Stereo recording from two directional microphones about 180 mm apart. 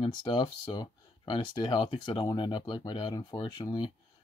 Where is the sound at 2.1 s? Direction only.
25° left (ahead or behind).